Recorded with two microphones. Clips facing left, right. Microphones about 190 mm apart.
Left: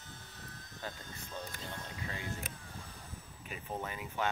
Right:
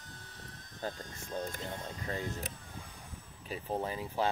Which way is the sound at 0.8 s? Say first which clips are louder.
Right 5 dB; 45° right (ahead or behind).